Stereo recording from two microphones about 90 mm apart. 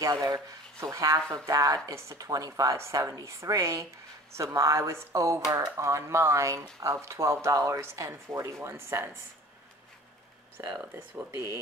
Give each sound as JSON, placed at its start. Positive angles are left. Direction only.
{"t": 0.0, "sound": "speech", "side_deg": -40}
{"t": 10.6, "sound": "speech", "side_deg": -30}